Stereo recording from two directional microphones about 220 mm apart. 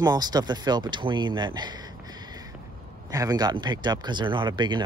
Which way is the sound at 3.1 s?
15° right (ahead or behind).